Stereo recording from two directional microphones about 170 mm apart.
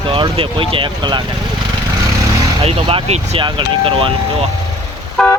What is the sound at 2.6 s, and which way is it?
Speech, 35° right (ahead or behind).